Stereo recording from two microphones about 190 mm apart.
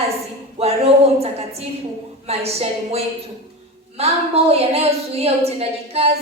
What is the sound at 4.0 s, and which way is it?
A woman's voice, 30° right (ahead or behind).